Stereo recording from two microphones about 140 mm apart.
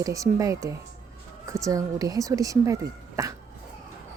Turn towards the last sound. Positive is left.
turn(degrees=-20)  # may be behind; listen again after turning